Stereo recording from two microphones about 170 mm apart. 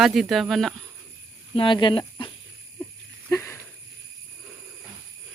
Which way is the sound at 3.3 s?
15° left (ahead or behind).